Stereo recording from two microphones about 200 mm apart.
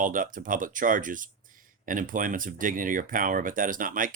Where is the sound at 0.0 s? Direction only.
40° right (ahead or behind).